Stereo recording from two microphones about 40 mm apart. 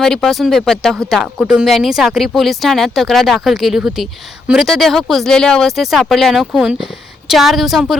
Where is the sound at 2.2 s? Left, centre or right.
Centre.